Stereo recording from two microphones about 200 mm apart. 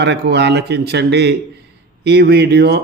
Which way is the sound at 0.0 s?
60° right (ahead or behind).